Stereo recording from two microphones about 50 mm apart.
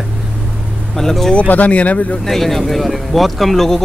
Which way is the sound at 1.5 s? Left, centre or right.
Left.